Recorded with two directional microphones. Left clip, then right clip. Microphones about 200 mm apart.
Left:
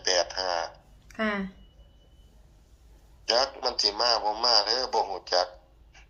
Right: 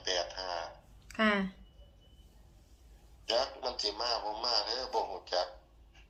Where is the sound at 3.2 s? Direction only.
55° left (ahead or behind).